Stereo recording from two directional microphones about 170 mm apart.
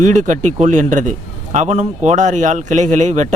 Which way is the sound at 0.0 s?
45° right (ahead or behind).